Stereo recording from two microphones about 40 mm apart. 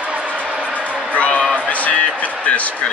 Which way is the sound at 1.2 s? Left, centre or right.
Left.